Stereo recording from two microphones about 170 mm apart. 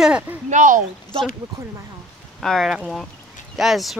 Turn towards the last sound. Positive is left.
turn(degrees=0)  # may be behind; listen again after turning